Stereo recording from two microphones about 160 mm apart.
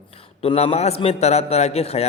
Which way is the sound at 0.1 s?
35° left (ahead or behind).